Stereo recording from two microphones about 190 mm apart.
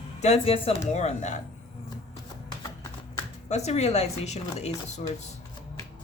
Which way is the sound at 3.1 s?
35° left (ahead or behind).